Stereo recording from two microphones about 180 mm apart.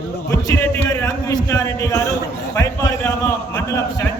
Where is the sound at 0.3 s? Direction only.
15° left (ahead or behind).